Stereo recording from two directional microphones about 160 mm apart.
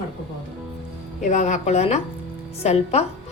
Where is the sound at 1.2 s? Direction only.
45° left (ahead or behind).